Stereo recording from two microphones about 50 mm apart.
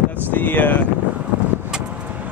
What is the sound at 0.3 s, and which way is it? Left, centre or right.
Speech, left.